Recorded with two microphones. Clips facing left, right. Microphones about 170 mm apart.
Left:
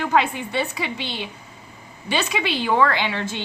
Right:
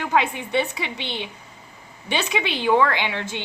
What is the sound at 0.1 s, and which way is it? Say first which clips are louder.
A woman's voice: right 2 dB; 20° right (ahead or behind).